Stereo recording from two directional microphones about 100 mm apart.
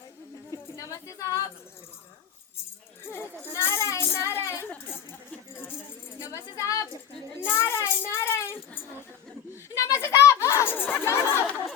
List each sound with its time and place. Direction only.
0.5 s a sound: 35° left (ahead or behind)
3.1 s children playing: 20° left (ahead or behind)
6.1 s tambourine: 30° left (ahead or behind)
7.4 s child singing: 25° left (ahead or behind)
8.1 s a sound: 25° left (ahead or behind)
10.9 s chatter: 25° left (ahead or behind)